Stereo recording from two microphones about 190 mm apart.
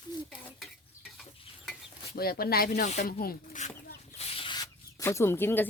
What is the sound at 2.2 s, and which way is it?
Speech, 55° left (ahead or behind).